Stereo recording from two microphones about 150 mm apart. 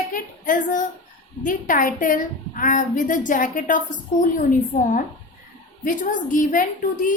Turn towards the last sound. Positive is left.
turn(degrees=65)  # may be behind; listen again after turning